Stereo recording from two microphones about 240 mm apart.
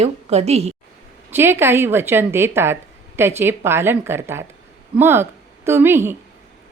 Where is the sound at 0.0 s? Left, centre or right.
Right.